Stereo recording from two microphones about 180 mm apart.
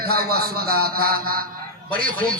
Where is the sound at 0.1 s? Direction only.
55° right (ahead or behind).